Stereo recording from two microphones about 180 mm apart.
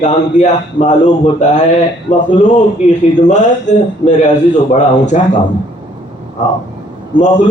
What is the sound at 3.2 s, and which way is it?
A man's voice, 40° left (ahead or behind).